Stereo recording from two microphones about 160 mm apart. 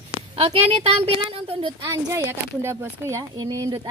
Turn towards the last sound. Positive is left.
turn(degrees=-25)  # may be behind; listen again after turning